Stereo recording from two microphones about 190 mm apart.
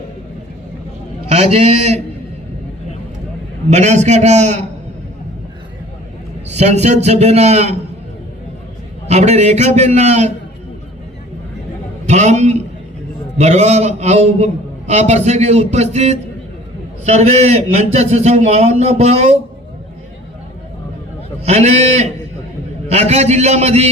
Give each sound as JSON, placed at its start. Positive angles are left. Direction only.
{"t": 1.3, "sound": "a man's voice", "side_deg": -30}
{"t": 3.7, "sound": "a man's voice", "side_deg": -35}
{"t": 6.5, "sound": "a man's voice", "side_deg": -35}
{"t": 9.0, "sound": "a man's voice", "side_deg": -35}
{"t": 12.0, "sound": "a man's voice", "side_deg": -40}
{"t": 21.4, "sound": "a man's voice", "side_deg": -35}